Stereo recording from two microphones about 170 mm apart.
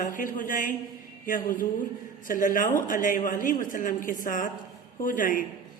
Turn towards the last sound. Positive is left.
turn(degrees=50)  # may be behind; listen again after turning